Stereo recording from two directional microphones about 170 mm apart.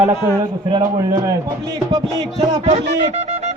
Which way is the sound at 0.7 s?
25° right (ahead or behind).